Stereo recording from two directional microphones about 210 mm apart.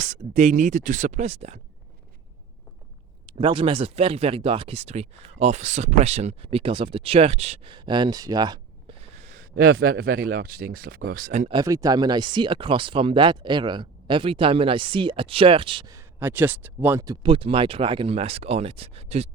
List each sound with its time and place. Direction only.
0.0 s speech: 35° right (ahead or behind)
3.3 s speech: 25° right (ahead or behind)
9.2 s a man's voice: 40° right (ahead or behind)
11.5 s speech: 15° right (ahead or behind)